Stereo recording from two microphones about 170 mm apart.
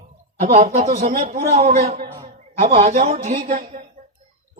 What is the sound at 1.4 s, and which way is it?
Speech, 40° right (ahead or behind).